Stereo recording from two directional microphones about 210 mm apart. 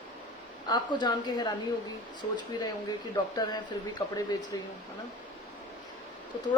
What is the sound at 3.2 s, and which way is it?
Speech, 20° left (ahead or behind).